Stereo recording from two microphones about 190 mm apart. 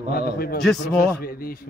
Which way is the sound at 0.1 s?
55° left (ahead or behind).